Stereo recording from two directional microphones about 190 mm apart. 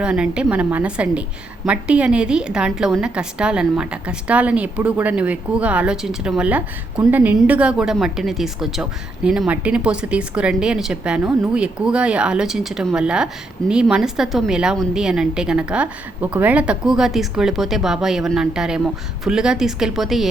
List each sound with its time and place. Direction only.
0.0 s a woman's voice: 5° right (ahead or behind)